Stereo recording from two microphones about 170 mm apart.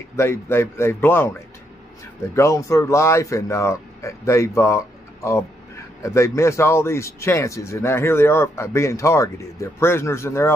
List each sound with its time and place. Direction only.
0.1 s speech: 15° left (ahead or behind)
2.3 s speech: 15° left (ahead or behind)